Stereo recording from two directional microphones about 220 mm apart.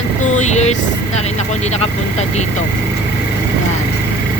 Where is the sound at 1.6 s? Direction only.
30° left (ahead or behind).